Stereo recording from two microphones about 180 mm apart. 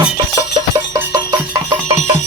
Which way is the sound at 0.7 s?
20° right (ahead or behind).